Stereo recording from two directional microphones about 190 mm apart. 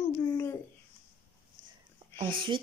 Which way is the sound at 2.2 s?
30° right (ahead or behind).